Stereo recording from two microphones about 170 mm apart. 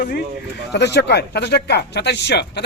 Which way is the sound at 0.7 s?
85° left.